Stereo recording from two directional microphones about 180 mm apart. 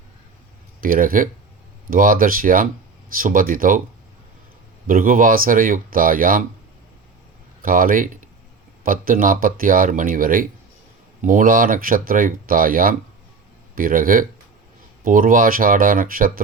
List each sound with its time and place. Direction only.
0.8 s speech: 50° right (ahead or behind)
4.9 s speech: 50° right (ahead or behind)
7.6 s speech: 50° right (ahead or behind)